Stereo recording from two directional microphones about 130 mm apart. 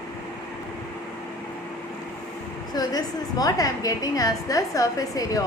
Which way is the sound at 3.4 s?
30° left (ahead or behind).